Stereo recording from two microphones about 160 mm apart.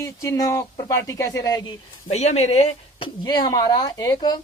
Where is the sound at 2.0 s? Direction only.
45° left (ahead or behind).